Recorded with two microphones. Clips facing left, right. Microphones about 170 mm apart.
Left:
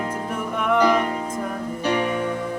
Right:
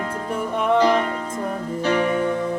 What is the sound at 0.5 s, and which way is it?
Music, 30° right (ahead or behind).